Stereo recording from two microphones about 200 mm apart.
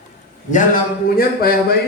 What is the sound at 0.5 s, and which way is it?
Speech, 45° left (ahead or behind).